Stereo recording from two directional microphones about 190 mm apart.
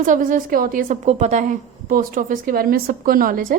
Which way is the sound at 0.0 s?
45° right (ahead or behind).